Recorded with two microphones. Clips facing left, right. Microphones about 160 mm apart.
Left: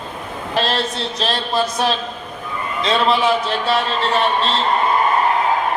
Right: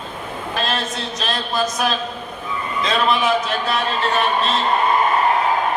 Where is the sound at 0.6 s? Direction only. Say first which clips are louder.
Left 4 dB; 30° left (ahead or behind).